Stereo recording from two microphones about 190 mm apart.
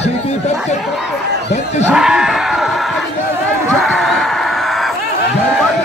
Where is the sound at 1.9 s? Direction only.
5° right (ahead or behind).